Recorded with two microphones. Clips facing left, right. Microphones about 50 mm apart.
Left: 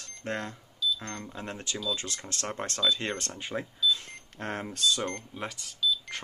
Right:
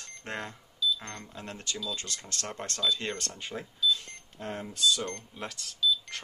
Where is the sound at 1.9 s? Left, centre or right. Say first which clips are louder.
Left 4 dB; left.